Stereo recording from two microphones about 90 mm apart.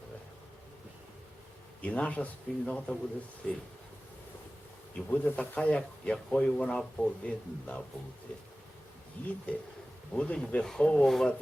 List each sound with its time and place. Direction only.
1.8 s speech: 15° left (ahead or behind)
4.9 s speech: 15° left (ahead or behind)
9.2 s speech: 15° left (ahead or behind)